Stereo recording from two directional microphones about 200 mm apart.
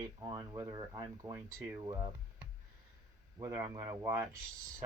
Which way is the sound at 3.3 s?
15° right (ahead or behind).